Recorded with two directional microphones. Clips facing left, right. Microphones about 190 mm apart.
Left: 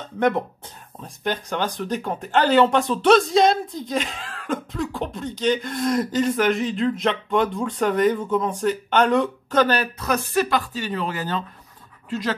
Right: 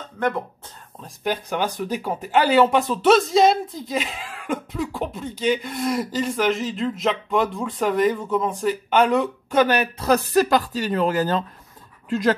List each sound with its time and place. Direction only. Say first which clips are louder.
1.0 s speech: right 1 dB; 5° right (ahead or behind)
9.9 s speech: right 4 dB; 35° right (ahead or behind); by 12.4 s 50° right (ahead or behind)